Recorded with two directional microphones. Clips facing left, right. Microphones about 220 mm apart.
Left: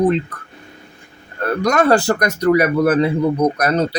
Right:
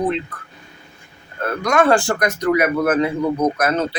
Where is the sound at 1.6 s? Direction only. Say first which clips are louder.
Left 1 dB; 40° left (ahead or behind).